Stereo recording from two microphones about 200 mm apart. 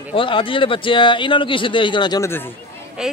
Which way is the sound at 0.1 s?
25° left (ahead or behind).